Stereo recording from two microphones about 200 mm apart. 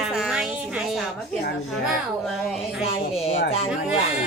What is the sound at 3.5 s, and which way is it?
Speech, 30° left (ahead or behind).